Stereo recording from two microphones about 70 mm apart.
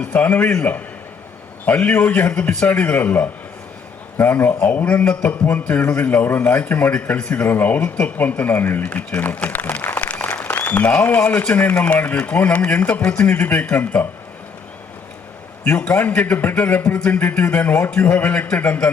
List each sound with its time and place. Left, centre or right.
0.0 s a man's voice: left
10.0 s a sound: left
11.8 s a man's voice: left
15.8 s a man's voice: left